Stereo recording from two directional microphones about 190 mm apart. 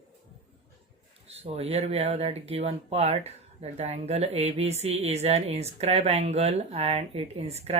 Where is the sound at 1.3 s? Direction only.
35° right (ahead or behind).